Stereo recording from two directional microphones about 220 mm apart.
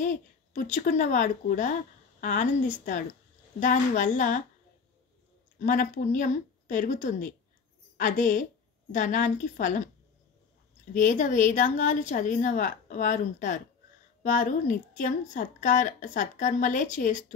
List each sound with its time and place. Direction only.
0.0 s a sound: 35° left (ahead or behind)
0.7 s a woman's voice: 35° left (ahead or behind)
5.6 s a woman's voice: 35° left (ahead or behind)
10.9 s a woman's voice: 35° left (ahead or behind)